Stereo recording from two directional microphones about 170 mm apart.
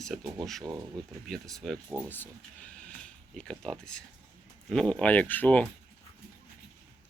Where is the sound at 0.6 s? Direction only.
15° right (ahead or behind).